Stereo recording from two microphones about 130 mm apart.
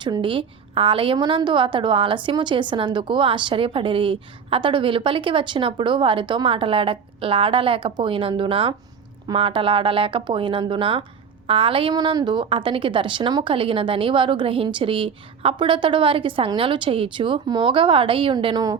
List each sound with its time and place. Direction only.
0.0 s a woman's voice: 40° right (ahead or behind)